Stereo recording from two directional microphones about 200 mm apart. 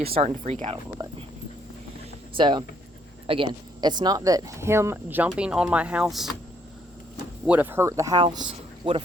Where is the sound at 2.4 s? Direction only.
25° right (ahead or behind); by 6.3 s centre (ahead or behind).